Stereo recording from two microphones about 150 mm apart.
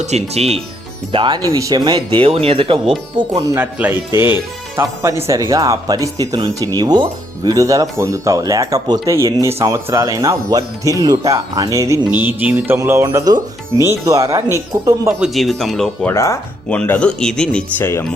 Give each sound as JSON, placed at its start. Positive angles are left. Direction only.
{"t": 0.0, "sound": "speech", "side_deg": -45}
{"t": 1.1, "sound": "speech", "side_deg": -30}
{"t": 3.2, "sound": "speech", "side_deg": -25}
{"t": 13.1, "sound": "speech", "side_deg": -25}
{"t": 15.2, "sound": "speech", "side_deg": 0}
{"t": 16.1, "sound": "speech", "side_deg": 20}